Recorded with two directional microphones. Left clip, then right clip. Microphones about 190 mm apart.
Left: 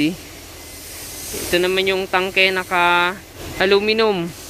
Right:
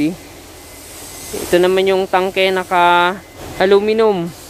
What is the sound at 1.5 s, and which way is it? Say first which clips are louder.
Speech: right 5 dB; 20° right (ahead or behind).